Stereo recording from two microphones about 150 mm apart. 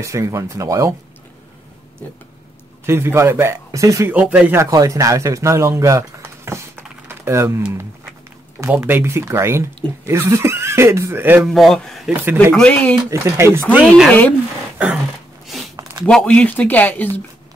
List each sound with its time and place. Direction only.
0.0 s speech: 20° right (ahead or behind)
2.9 s speech: 15° right (ahead or behind)
4.1 s speech: 10° right (ahead or behind)
11.4 s speech: centre (ahead or behind)
12.1 s speech: 15° right (ahead or behind)
12.5 s speech: 5° left (ahead or behind)
13.1 s speech: 20° right (ahead or behind)
13.8 s speech: centre (ahead or behind)
16.0 s speech: 5° left (ahead or behind)